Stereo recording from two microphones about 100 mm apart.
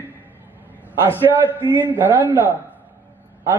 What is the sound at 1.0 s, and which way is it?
A man's voice, 20° right (ahead or behind).